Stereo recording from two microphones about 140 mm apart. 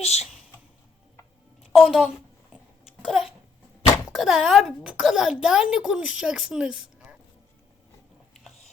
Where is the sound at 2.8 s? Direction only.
5° right (ahead or behind).